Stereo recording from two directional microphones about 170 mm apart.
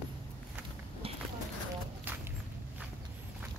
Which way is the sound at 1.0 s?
35° right (ahead or behind).